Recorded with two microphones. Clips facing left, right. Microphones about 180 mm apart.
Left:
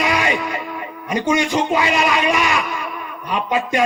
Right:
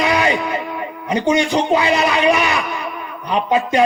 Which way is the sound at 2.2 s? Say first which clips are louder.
Right 3 dB; 25° right (ahead or behind).